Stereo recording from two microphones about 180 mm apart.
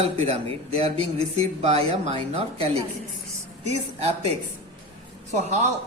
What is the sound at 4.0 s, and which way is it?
Speech, 35° right (ahead or behind).